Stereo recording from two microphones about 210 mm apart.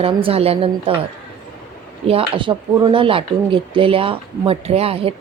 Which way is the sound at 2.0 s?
25° right (ahead or behind).